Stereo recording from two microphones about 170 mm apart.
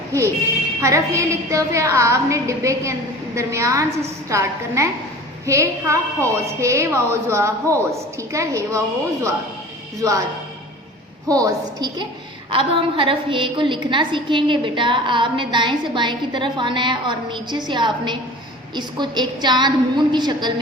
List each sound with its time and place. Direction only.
0.8 s a woman's voice: 15° right (ahead or behind)
10.0 s a woman's voice: 20° right (ahead or behind)
11.3 s a woman's voice: 20° right (ahead or behind)